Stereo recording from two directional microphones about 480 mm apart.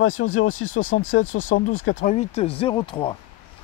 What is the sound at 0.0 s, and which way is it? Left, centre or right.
Speech, left.